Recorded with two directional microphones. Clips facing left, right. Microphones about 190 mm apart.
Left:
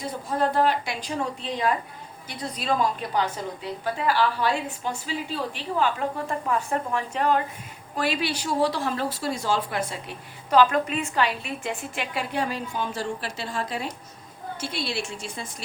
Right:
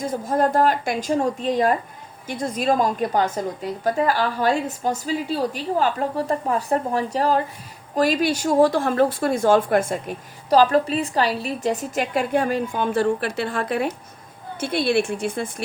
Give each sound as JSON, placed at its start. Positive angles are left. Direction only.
{"t": 0.0, "sound": "a woman's voice", "side_deg": -45}